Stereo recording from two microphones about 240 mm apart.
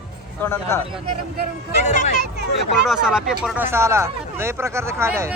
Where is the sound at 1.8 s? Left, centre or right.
Left.